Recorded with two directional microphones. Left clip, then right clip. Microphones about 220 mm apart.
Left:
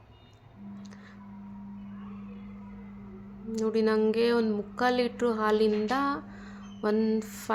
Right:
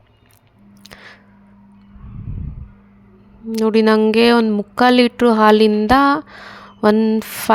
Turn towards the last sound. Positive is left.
turn(degrees=-45)  # may be behind; listen again after turning